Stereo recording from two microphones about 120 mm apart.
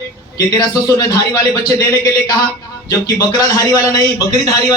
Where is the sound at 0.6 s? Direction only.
30° left (ahead or behind).